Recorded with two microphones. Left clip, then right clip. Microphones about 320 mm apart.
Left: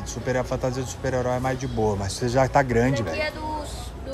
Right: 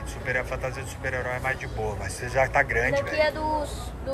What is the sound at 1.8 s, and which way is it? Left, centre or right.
Speech, left.